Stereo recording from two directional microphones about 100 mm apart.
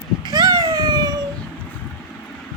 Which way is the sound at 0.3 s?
40° right (ahead or behind).